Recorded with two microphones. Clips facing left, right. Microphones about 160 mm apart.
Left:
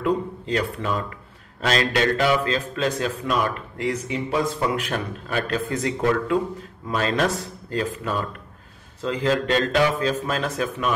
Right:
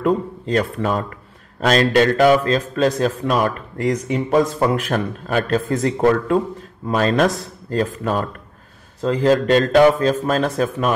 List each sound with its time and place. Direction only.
0.0 s a man's voice: 45° right (ahead or behind)